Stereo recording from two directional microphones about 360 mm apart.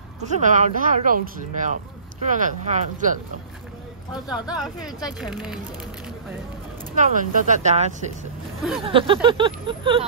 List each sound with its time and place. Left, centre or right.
0.2 s speech: centre
4.3 s speech: centre
7.0 s speech: right
8.8 s vehicle: centre